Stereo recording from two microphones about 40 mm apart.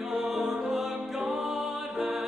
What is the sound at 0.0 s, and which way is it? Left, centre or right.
Music, centre.